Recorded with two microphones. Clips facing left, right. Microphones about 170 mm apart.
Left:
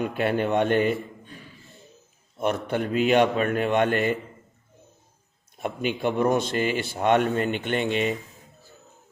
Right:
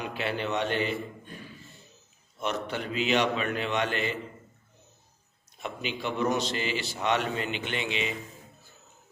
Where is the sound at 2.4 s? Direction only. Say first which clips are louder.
Left 6 dB; 50° left (ahead or behind).